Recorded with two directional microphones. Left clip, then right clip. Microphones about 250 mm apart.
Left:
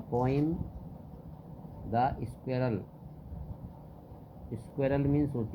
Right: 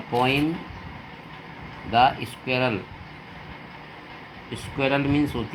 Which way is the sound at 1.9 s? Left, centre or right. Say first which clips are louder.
Right 11 dB; right.